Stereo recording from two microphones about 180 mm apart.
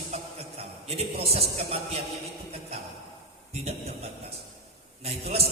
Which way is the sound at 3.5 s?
35° right (ahead or behind).